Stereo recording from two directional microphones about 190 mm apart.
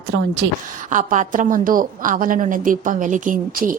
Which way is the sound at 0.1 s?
65° right (ahead or behind).